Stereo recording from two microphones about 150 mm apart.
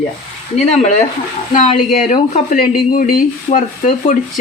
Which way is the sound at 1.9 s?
65° left (ahead or behind).